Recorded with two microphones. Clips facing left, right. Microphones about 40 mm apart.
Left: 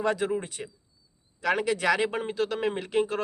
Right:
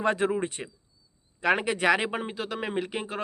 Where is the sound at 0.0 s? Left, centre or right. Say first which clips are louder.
Right 1 dB; right.